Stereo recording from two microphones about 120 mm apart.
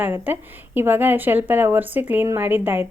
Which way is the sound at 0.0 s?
15° right (ahead or behind).